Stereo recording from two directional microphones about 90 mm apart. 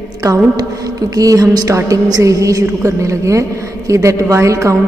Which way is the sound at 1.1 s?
40° right (ahead or behind).